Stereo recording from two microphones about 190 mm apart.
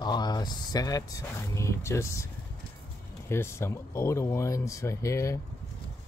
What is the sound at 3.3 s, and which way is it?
Speech, 15° left (ahead or behind).